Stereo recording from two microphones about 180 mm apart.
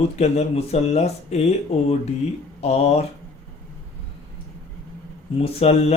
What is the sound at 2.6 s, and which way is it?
Speech, 35° left (ahead or behind).